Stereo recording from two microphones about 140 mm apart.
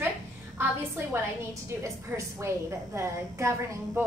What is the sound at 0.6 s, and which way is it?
A woman's voice, 15° right (ahead or behind).